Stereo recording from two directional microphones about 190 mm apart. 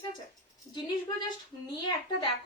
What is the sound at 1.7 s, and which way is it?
Speech, 20° left (ahead or behind).